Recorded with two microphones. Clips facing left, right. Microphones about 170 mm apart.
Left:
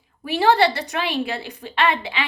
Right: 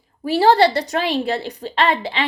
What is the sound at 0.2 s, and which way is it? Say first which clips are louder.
A woman's voice: right 3 dB; 35° right (ahead or behind).